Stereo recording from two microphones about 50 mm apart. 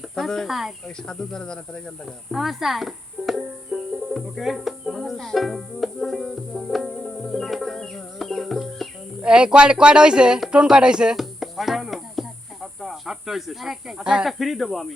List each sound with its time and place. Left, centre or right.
0.2 s speech: centre
0.4 s speech: centre
1.0 s speech: centre
2.3 s banjo: centre
9.2 s speech: centre
11.2 s music: centre
12.8 s speech: centre
14.0 s speech: centre
14.3 s speech: centre